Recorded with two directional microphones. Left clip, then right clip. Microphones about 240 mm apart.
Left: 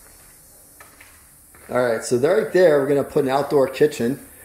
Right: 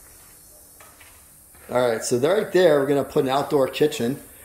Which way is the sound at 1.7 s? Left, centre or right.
Centre.